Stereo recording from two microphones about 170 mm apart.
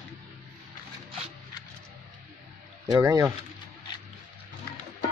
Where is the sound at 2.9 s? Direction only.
20° right (ahead or behind).